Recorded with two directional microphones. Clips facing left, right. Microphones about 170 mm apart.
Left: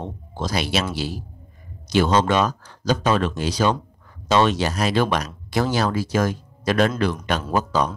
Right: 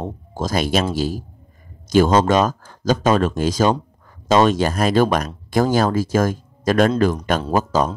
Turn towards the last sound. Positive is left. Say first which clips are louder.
# right 3 dB
turn(degrees=-45)  # may be behind; listen again after turning